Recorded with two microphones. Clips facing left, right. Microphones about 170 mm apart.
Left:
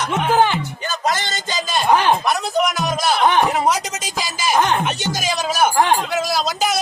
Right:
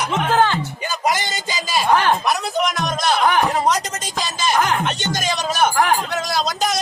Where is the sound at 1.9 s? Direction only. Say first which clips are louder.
Left 1 dB; 15° left (ahead or behind).